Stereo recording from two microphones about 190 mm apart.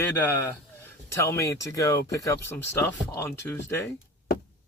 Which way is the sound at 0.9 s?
15° left (ahead or behind).